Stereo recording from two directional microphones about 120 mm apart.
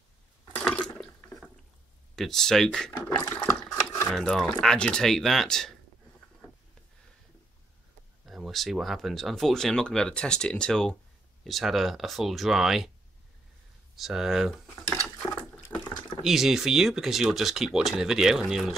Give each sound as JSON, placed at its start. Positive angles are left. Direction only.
{"t": 0.7, "sound": "water", "side_deg": 10}
{"t": 2.1, "sound": "speech", "side_deg": 5}
{"t": 3.2, "sound": "a sound", "side_deg": 25}
{"t": 3.4, "sound": "a sound", "side_deg": 5}
{"t": 4.1, "sound": "speech", "side_deg": 5}
{"t": 8.3, "sound": "speech", "side_deg": 0}
{"t": 13.9, "sound": "speech", "side_deg": -5}
{"t": 15.1, "sound": "water", "side_deg": 15}
{"t": 16.3, "sound": "speech", "side_deg": -5}